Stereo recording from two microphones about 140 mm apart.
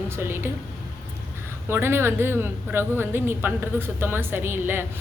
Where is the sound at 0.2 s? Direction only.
15° right (ahead or behind).